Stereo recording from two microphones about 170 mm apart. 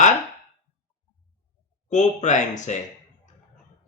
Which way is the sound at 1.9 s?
45° left (ahead or behind).